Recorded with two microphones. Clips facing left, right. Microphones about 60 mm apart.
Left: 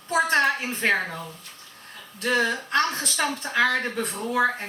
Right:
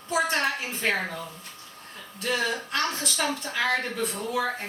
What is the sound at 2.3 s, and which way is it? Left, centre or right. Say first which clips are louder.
Speech: left 4 dB; left.